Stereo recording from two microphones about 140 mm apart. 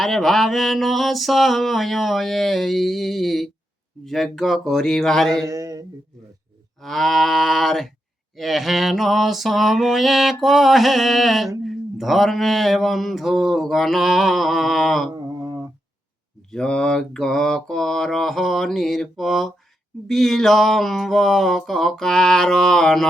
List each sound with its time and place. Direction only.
0.0 s mantra: centre (ahead or behind)
5.5 s mantra: 25° right (ahead or behind)
6.8 s mantra: centre (ahead or behind)
15.1 s a sound: 25° right (ahead or behind)
16.5 s mantra: 5° left (ahead or behind)